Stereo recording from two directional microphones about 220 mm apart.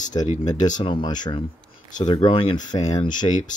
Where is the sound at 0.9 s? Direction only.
20° left (ahead or behind).